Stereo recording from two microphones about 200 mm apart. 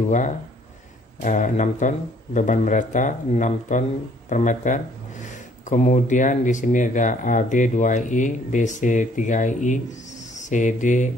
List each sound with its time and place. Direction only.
1.2 s speech: 40° left (ahead or behind)